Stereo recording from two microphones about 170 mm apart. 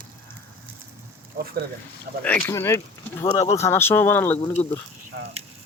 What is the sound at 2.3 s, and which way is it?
Speech, 15° left (ahead or behind).